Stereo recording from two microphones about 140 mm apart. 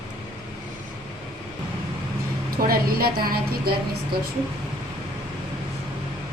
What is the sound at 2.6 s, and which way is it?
A woman's voice, 90° right.